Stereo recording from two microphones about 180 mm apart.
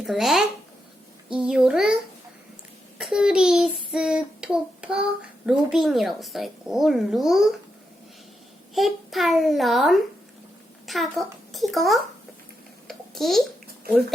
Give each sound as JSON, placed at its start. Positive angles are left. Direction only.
{"t": 0.0, "sound": "a child's voice", "side_deg": 0}
{"t": 3.0, "sound": "child singing", "side_deg": -5}
{"t": 5.5, "sound": "speech", "side_deg": 0}
{"t": 8.7, "sound": "a child's voice", "side_deg": 0}
{"t": 12.9, "sound": "babbling", "side_deg": 0}